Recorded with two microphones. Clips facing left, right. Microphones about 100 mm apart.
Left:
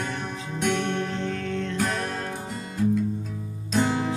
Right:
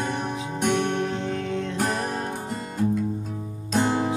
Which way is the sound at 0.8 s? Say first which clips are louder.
Right 2 dB; 15° right (ahead or behind).